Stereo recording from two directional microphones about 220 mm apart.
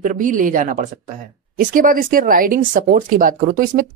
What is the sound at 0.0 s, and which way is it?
Speech, 35° right (ahead or behind).